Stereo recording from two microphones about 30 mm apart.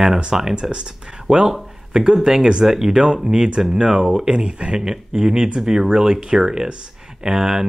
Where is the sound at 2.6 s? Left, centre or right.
Centre.